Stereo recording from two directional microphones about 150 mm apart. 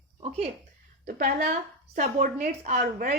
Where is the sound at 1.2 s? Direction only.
60° right (ahead or behind).